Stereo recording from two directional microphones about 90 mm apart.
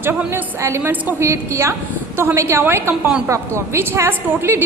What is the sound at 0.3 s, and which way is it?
Speech, 30° right (ahead or behind).